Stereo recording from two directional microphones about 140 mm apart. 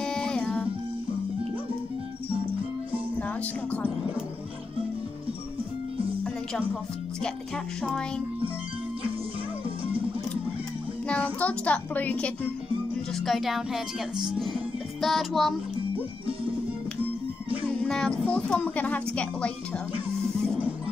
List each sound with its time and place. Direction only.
0.0 s music: 5° left (ahead or behind)
7.2 s speech: 5° left (ahead or behind)
11.1 s a child's voice: 10° left (ahead or behind)
13.1 s speech: centre (ahead or behind)
17.8 s speech: 5° left (ahead or behind)